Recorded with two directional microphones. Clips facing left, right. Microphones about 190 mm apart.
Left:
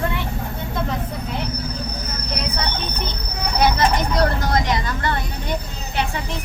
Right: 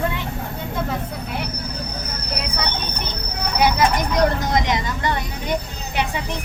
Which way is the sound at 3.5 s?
10° right (ahead or behind).